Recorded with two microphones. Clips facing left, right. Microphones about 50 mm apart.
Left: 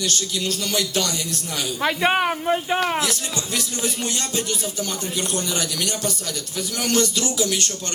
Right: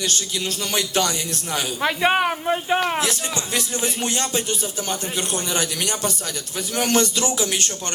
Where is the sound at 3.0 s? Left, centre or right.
Right.